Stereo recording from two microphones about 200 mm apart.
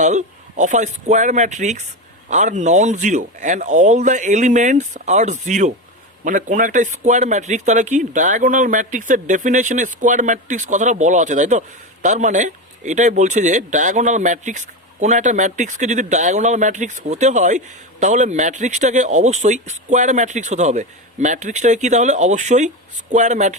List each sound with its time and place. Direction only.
0.0 s a man's voice: 35° right (ahead or behind)